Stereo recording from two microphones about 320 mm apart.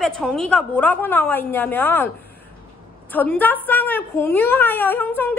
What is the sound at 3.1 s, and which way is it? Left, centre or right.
A woman's voice, centre.